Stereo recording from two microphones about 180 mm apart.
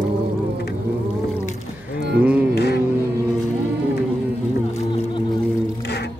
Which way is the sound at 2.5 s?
65° left (ahead or behind).